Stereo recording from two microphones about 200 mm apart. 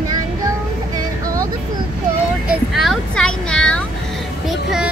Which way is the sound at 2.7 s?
Centre (ahead or behind).